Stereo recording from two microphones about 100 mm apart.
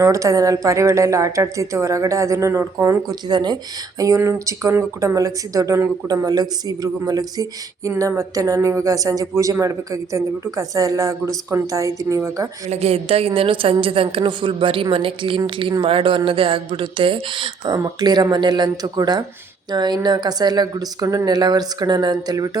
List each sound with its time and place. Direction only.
0.0 s speech: 35° right (ahead or behind)
3.1 s speech: 45° right (ahead or behind)
12.7 s a woman's voice: 90° right; by 17.7 s 55° right (ahead or behind)
17.7 s a woman's voice: 40° right (ahead or behind)